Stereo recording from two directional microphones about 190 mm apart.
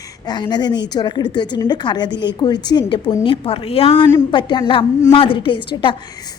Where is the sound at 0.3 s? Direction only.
20° left (ahead or behind).